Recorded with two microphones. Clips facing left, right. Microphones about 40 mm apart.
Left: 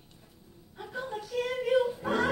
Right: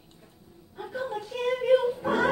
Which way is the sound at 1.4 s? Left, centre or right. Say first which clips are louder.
Right 4 dB; centre.